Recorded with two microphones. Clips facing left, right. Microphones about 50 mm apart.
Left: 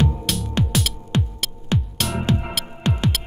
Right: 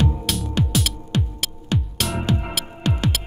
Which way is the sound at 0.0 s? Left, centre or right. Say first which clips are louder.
Even; centre.